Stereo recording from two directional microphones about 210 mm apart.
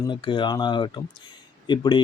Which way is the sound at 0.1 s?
20° left (ahead or behind).